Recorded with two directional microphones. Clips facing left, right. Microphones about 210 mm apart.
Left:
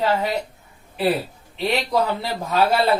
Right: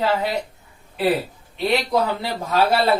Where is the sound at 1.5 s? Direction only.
Centre (ahead or behind).